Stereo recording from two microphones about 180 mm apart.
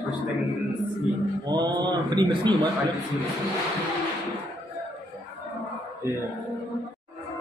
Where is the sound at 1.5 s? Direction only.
25° right (ahead or behind).